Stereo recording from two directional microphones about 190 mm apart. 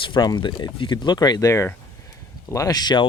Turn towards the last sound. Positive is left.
turn(degrees=20)  # may be behind; listen again after turning